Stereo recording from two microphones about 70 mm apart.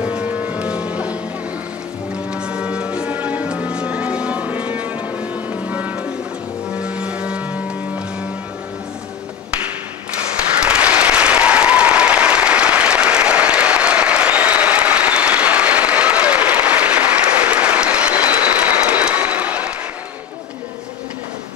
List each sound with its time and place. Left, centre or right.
0.0 s music: centre
2.3 s music: centre
10.6 s applause: centre